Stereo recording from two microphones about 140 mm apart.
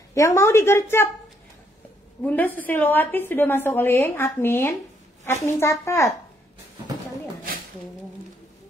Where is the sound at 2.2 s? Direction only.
15° left (ahead or behind).